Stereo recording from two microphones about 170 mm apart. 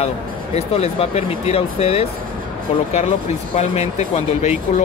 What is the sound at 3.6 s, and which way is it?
Speech, 40° left (ahead or behind).